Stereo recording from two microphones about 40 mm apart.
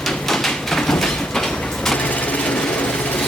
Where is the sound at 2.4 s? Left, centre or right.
Left.